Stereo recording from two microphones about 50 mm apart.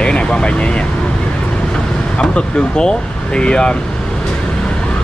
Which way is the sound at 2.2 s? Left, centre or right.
Centre.